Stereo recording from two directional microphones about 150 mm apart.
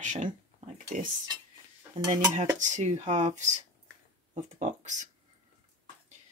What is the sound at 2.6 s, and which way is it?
Speech, 55° right (ahead or behind).